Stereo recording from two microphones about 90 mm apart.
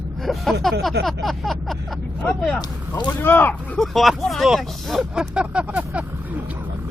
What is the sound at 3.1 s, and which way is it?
Speech, 25° left (ahead or behind).